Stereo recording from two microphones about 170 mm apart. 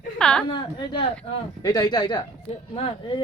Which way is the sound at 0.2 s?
5° left (ahead or behind).